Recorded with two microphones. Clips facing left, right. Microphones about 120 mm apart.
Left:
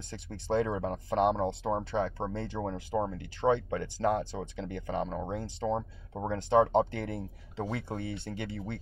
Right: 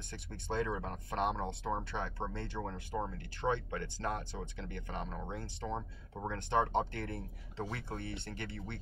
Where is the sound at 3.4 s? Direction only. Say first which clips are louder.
Left 7 dB; 30° left (ahead or behind).